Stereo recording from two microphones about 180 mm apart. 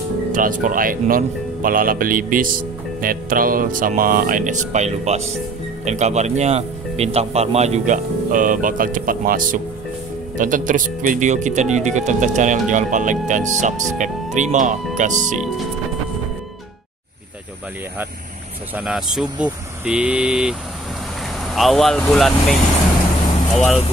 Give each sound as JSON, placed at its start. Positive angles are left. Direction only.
{"t": 0.3, "sound": "speech", "side_deg": -50}
{"t": 18.8, "sound": "speech", "side_deg": -5}
{"t": 21.5, "sound": "speech", "side_deg": 0}